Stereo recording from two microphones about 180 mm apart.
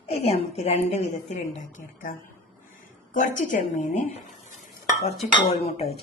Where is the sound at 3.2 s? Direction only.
45° left (ahead or behind).